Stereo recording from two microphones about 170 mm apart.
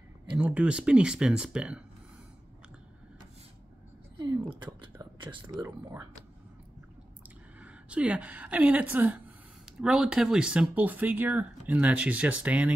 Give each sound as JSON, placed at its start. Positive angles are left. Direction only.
{"t": 0.3, "sound": "speech", "side_deg": -10}
{"t": 4.3, "sound": "speech", "side_deg": -25}
{"t": 7.2, "sound": "a woman's voice", "side_deg": -10}